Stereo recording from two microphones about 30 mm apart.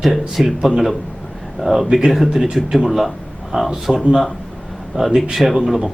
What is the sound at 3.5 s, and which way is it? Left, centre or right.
Speech, right.